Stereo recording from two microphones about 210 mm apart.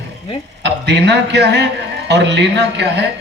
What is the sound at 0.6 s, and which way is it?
A man's voice, 55° right (ahead or behind).